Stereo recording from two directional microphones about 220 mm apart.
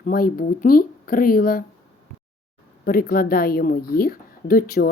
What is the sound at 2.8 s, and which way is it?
Speech, 40° left (ahead or behind).